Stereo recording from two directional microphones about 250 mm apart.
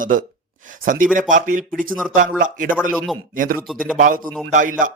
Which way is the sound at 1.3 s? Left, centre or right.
Right.